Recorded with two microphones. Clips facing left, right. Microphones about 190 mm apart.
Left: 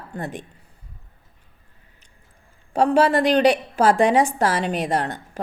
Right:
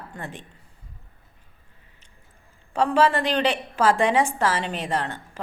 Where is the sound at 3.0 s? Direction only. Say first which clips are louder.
Left 6 dB; 40° left (ahead or behind).